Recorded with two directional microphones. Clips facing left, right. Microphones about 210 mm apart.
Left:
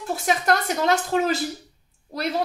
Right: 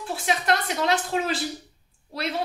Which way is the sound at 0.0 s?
45° left (ahead or behind).